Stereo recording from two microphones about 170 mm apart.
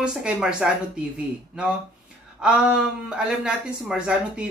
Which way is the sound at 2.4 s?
5° right (ahead or behind).